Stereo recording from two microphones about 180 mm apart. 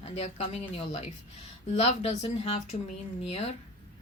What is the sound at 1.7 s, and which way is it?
Speech, 35° left (ahead or behind).